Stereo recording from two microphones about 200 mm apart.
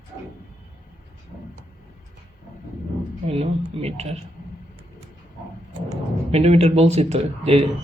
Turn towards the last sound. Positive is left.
turn(degrees=-30)  # may be behind; listen again after turning